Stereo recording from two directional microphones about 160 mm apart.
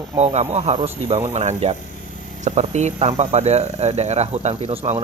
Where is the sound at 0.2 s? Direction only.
45° right (ahead or behind).